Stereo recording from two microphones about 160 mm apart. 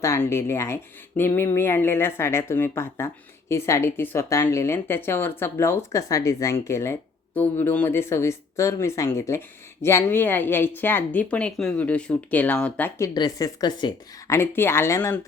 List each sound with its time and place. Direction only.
0.0 s speech: 15° left (ahead or behind)
13.1 s speech: 25° left (ahead or behind)